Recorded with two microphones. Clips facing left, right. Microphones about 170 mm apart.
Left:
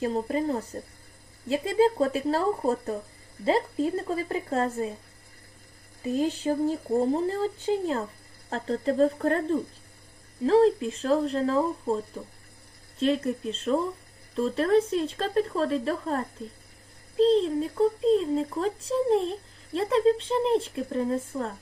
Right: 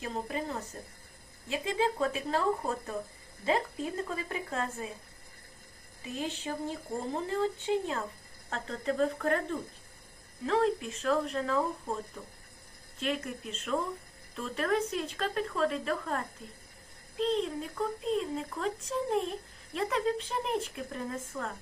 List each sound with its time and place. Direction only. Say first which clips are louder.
0.0 s a child's voice: left 9 dB; 35° left (ahead or behind)
6.0 s a child's voice: left 10 dB; 40° left (ahead or behind)
13.0 s a child's voice: left 9 dB; 30° left (ahead or behind)